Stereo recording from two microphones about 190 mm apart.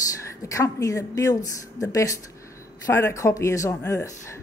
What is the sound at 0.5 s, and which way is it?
A woman's voice, 15° left (ahead or behind).